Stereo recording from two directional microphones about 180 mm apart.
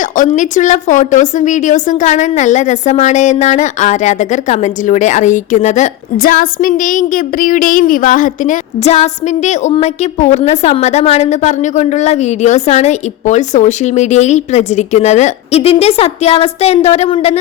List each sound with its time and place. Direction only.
0.2 s a woman's voice: 45° left (ahead or behind)